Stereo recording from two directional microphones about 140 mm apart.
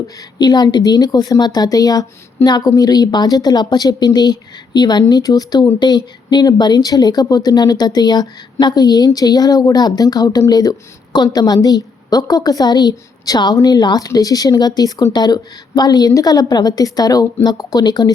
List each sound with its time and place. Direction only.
0.2 s a woman's voice: 30° left (ahead or behind)